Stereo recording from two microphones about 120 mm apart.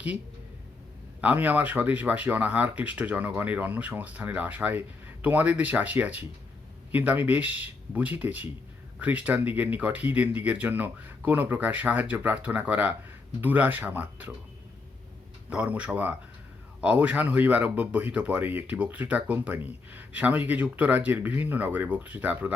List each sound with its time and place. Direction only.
1.2 s speech: 15° right (ahead or behind)
15.4 s speech: 10° right (ahead or behind)